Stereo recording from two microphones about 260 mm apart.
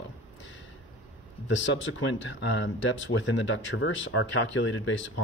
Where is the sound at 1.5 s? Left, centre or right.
Left.